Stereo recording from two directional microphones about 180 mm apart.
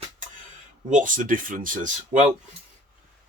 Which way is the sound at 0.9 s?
50° right (ahead or behind).